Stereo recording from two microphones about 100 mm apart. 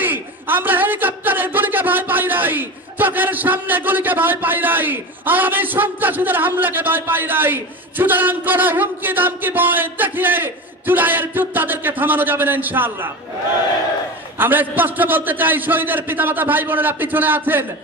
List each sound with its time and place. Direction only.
0.0 s a man's voice: 20° right (ahead or behind)
14.4 s a man's voice: 20° right (ahead or behind)